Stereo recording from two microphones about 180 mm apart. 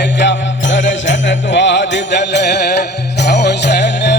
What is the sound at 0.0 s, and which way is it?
Jingle bell, 75° left (ahead or behind).